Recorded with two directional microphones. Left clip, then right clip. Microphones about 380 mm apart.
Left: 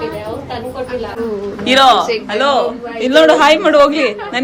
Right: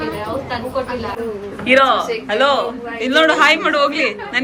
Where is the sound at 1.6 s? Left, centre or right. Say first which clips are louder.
Left 4 dB; centre.